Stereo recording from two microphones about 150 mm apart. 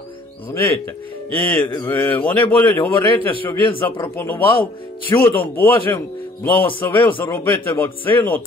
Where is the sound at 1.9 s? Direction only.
10° left (ahead or behind).